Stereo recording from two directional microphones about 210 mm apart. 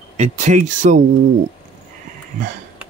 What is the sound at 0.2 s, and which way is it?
Speech, 35° right (ahead or behind).